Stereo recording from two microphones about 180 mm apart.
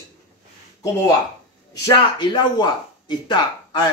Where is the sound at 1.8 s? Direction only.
25° left (ahead or behind).